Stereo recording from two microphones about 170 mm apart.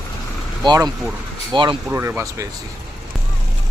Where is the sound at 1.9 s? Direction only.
15° right (ahead or behind).